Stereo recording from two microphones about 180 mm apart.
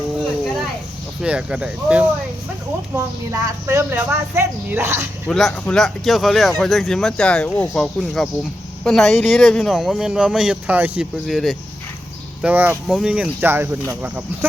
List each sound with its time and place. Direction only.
1.2 s speech: 5° right (ahead or behind)
5.3 s speech: centre (ahead or behind)